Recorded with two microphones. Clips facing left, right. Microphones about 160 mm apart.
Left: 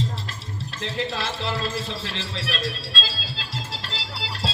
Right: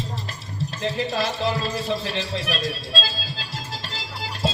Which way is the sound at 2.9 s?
45° right (ahead or behind).